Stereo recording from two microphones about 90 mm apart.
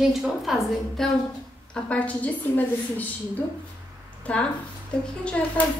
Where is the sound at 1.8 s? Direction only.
15° left (ahead or behind).